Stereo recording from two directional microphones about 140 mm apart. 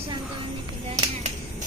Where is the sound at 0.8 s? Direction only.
45° right (ahead or behind).